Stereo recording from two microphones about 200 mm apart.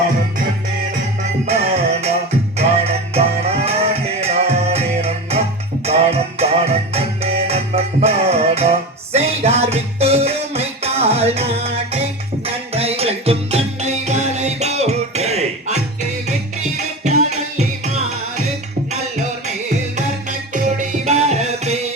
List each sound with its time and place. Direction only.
1.2 s music: 30° right (ahead or behind)
20.5 s music: 40° right (ahead or behind)